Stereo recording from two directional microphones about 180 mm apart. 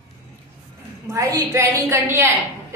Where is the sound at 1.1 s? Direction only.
20° right (ahead or behind).